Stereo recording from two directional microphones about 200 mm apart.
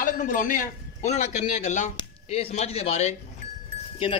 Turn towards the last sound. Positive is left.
turn(degrees=25)  # may be behind; listen again after turning